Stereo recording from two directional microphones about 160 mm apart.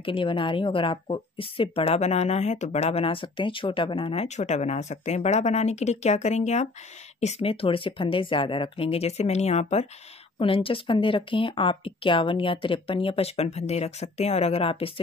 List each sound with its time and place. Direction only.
0.0 s a woman's voice: 30° left (ahead or behind)